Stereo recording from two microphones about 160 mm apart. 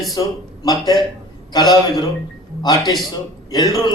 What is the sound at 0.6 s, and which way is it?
Speech, 25° left (ahead or behind).